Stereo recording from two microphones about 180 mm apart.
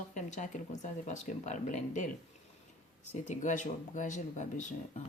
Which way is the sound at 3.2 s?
45° left (ahead or behind).